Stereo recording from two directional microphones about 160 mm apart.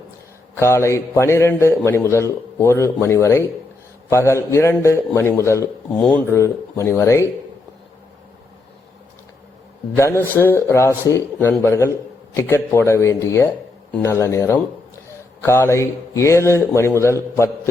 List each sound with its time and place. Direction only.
0.5 s a man's voice: 15° left (ahead or behind)
9.9 s a man's voice: 15° left (ahead or behind)